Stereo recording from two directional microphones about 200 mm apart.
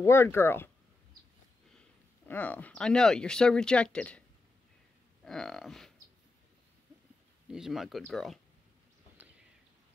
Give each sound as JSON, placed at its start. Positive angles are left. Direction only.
{"t": 0.0, "sound": "speech", "side_deg": 10}
{"t": 1.8, "sound": "speech", "side_deg": 10}
{"t": 5.2, "sound": "speech", "side_deg": 0}
{"t": 7.4, "sound": "speech", "side_deg": -5}